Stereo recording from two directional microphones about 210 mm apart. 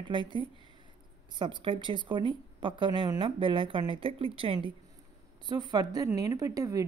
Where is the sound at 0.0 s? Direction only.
20° right (ahead or behind).